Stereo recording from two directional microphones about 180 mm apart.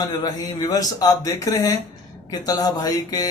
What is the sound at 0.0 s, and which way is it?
A man's voice, 20° left (ahead or behind).